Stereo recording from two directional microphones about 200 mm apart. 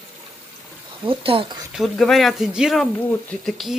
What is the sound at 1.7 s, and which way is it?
Speech, centre (ahead or behind).